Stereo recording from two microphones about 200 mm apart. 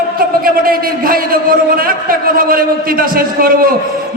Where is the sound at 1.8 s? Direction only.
45° right (ahead or behind).